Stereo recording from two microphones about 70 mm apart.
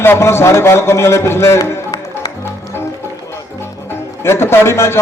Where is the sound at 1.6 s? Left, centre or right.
Left.